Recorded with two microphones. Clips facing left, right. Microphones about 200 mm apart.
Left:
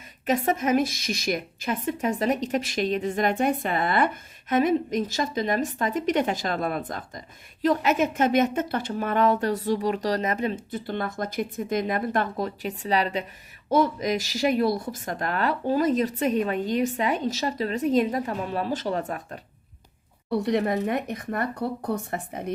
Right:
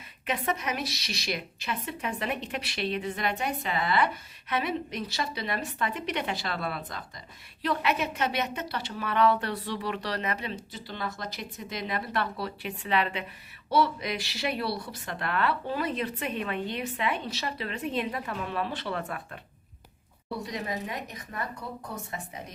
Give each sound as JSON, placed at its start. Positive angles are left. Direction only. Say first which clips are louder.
{"t": 0.3, "sound": "a woman's voice", "louder": "left 8 dB", "side_deg": 45}
{"t": 20.4, "sound": "speech", "louder": "left 11 dB", "side_deg": 60}